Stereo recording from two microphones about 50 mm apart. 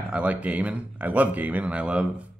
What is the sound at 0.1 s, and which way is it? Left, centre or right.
Speech, right.